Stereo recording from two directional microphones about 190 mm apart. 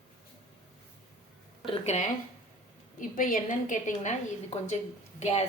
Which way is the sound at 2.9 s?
45° left (ahead or behind).